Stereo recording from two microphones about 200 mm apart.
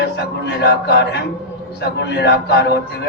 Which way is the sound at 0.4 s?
55° left (ahead or behind).